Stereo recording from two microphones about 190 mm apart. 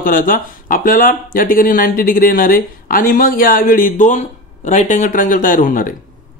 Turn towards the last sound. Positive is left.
turn(degrees=45)  # may be behind; listen again after turning